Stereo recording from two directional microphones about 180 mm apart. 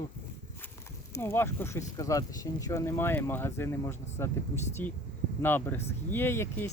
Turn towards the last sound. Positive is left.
turn(degrees=15)  # may be behind; listen again after turning